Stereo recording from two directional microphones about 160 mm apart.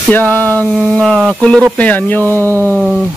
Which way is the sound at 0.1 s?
10° left (ahead or behind).